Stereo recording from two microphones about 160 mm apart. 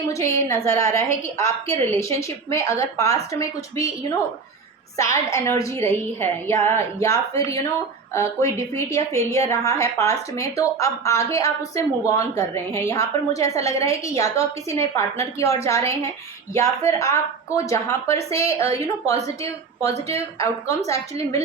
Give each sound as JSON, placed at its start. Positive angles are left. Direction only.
{"t": 0.1, "sound": "a woman's voice", "side_deg": 20}
{"t": 4.9, "sound": "a woman's voice", "side_deg": 20}
{"t": 20.4, "sound": "a woman's voice", "side_deg": 20}